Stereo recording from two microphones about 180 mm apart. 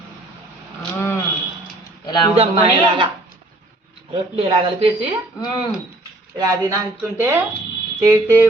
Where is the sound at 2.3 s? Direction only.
30° right (ahead or behind).